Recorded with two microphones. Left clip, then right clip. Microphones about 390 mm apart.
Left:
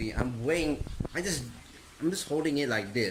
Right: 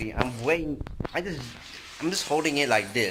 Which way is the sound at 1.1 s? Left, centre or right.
Centre.